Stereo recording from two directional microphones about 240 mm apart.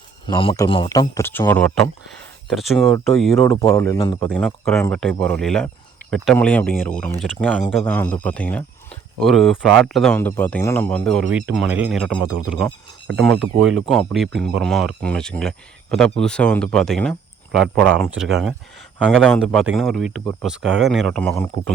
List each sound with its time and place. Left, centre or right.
0.3 s speech: left; by 3.4 s centre
3.4 s speech: centre
4.3 s speech: centre
12.2 s speech: right
12.5 s speech: centre
13.4 s speech: right
13.8 s speech: centre